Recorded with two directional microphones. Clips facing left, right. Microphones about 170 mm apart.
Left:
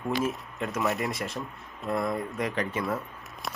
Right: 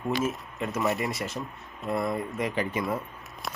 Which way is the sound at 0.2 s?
Centre (ahead or behind).